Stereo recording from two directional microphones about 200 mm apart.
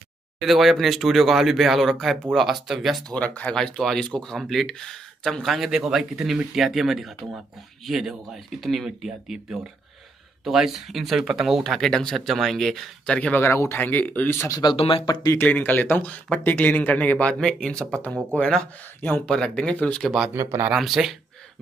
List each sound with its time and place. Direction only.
0.4 s speech: centre (ahead or behind); by 15.3 s 25° left (ahead or behind)
15.3 s speech: 10° left (ahead or behind)
20.3 s speech: 10° right (ahead or behind)
20.7 s speech: centre (ahead or behind)